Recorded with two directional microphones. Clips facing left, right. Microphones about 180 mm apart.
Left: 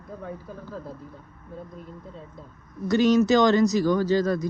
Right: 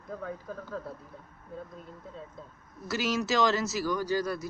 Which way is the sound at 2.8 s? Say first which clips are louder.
Left 11 dB; 5° right (ahead or behind).